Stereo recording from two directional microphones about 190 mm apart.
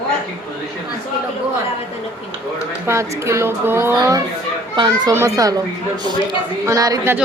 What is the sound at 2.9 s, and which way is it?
A woman's voice, 15° right (ahead or behind).